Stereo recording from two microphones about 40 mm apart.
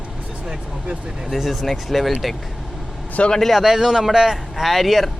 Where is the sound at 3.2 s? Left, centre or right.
Left.